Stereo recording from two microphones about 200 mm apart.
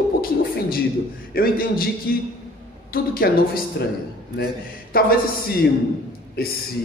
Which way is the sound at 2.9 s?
45° left (ahead or behind).